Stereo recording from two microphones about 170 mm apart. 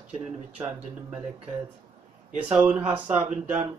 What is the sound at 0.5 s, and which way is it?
Speech, 5° right (ahead or behind).